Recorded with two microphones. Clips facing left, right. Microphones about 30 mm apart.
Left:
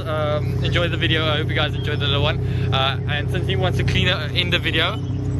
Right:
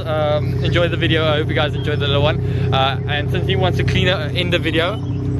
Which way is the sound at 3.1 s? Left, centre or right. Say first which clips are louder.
Right 4 dB; centre.